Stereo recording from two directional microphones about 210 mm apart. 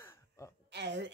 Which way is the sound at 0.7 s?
55° right (ahead or behind).